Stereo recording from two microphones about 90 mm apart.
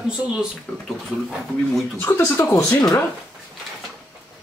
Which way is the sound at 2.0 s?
25° left (ahead or behind).